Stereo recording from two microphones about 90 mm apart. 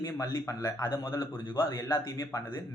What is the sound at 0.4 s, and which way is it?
Speech, 35° left (ahead or behind).